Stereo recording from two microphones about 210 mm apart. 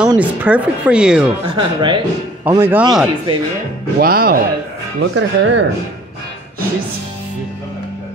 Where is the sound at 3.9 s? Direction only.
45° right (ahead or behind).